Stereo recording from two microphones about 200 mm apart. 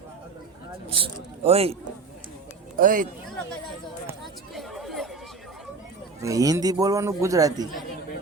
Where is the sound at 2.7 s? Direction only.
45° right (ahead or behind).